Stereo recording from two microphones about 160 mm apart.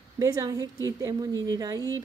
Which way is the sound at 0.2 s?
20° right (ahead or behind).